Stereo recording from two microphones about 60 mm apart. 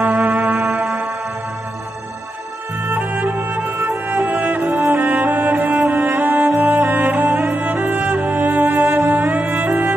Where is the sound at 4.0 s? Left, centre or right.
Right.